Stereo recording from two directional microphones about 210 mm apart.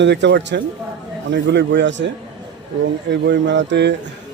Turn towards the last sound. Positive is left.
turn(degrees=-55)  # may be behind; listen again after turning